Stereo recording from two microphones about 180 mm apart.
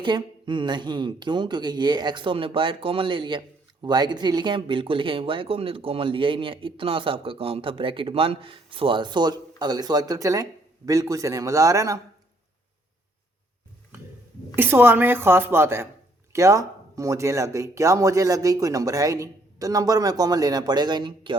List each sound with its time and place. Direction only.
0.0 s speech: 25° right (ahead or behind)
14.5 s a woman's voice: 10° right (ahead or behind)